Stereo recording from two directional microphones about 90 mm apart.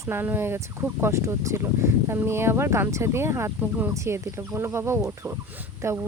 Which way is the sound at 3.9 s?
30° right (ahead or behind).